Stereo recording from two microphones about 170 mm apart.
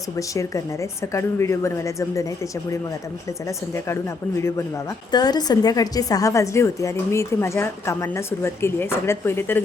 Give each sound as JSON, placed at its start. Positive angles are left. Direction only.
{"t": 0.2, "sound": "a woman's voice", "side_deg": 20}
{"t": 4.4, "sound": "a woman's voice", "side_deg": 15}